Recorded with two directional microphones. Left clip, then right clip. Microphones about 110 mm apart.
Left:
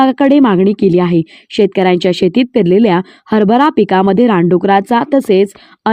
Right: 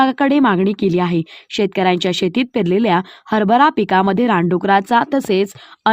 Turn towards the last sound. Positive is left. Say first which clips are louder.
# left 6 dB
turn(degrees=50)  # may be behind; listen again after turning